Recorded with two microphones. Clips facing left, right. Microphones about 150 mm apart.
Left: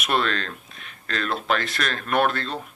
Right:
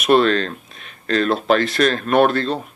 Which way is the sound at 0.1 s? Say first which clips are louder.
Right 10 dB; 30° right (ahead or behind).